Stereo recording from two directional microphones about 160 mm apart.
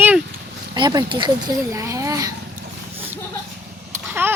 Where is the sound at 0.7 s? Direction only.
30° right (ahead or behind).